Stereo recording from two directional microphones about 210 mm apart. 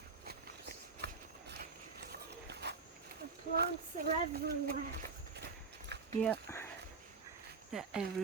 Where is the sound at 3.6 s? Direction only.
50° right (ahead or behind).